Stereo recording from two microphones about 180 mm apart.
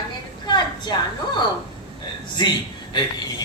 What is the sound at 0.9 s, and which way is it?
Speech, 25° left (ahead or behind).